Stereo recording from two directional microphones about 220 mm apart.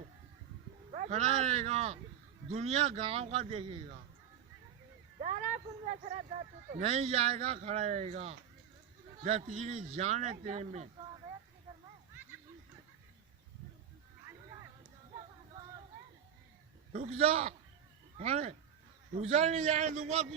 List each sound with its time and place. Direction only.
0.9 s a man's voice: 35° right (ahead or behind)
5.2 s a sound: 35° right (ahead or behind)
6.7 s speech: 30° right (ahead or behind)
16.9 s a man's voice: 30° right (ahead or behind)